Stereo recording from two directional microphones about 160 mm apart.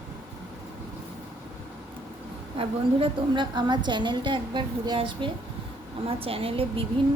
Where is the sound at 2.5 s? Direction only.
30° right (ahead or behind).